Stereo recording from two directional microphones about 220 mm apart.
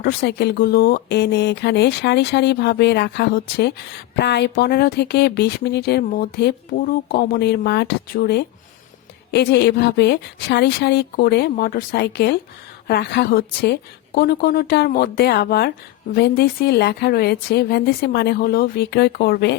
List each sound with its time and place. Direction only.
0.0 s speech: 45° left (ahead or behind)